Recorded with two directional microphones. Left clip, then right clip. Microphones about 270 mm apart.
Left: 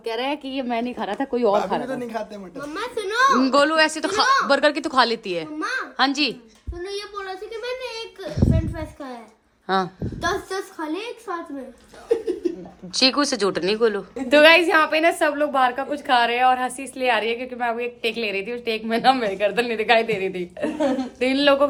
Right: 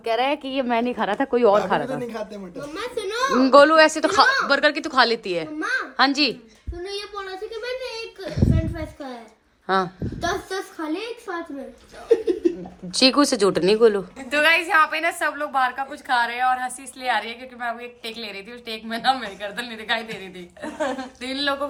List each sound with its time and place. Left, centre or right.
0.0 s a woman's voice: centre
4.4 s a woman's voice: centre
6.8 s a woman's voice: left
8.3 s a woman's voice: centre
8.5 s a sound: left
9.6 s a woman's voice: centre
10.2 s a child's voice: left
12.9 s a woman's voice: centre